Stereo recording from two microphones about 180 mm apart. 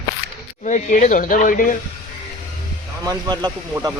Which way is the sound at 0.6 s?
45° left (ahead or behind).